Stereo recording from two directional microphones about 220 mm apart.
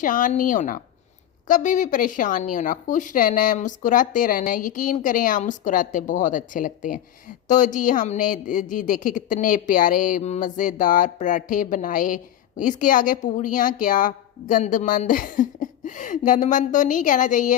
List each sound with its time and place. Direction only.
0.0 s speech: 35° left (ahead or behind)